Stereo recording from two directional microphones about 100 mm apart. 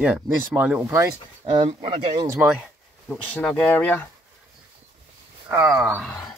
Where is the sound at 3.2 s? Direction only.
15° left (ahead or behind).